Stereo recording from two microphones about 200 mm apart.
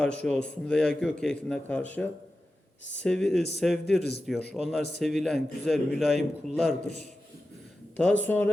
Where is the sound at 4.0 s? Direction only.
55° left (ahead or behind).